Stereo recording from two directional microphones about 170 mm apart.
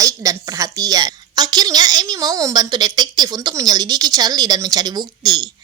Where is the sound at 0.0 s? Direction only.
20° right (ahead or behind).